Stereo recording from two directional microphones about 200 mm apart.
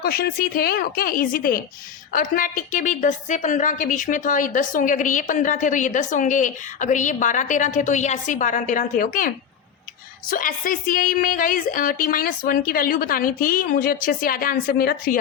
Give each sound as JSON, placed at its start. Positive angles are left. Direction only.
{"t": 0.0, "sound": "a woman's voice", "side_deg": 50}